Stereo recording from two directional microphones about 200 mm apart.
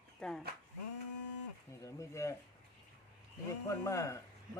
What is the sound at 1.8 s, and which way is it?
Speech, 15° left (ahead or behind).